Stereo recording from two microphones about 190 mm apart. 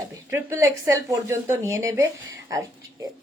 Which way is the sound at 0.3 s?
15° right (ahead or behind).